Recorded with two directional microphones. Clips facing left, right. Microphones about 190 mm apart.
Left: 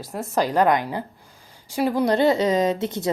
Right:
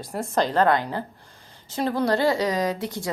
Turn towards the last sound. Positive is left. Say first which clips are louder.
# left 4 dB
turn(degrees=20)  # may be behind; listen again after turning